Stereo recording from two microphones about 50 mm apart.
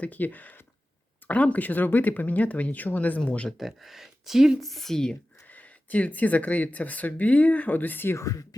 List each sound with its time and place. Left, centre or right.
0.0 s speech: left
3.6 s speech: centre
4.6 s a woman's voice: centre
5.5 s speech: left
8.1 s speech: left